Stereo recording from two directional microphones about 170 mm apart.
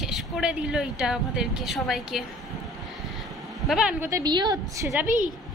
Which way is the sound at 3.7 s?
5° right (ahead or behind).